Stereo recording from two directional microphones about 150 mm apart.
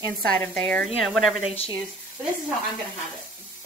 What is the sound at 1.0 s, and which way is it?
Speech, centre (ahead or behind).